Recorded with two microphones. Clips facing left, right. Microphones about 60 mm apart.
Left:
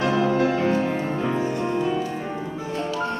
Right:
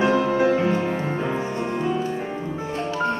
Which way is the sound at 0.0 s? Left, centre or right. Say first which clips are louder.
Right 2 dB; centre.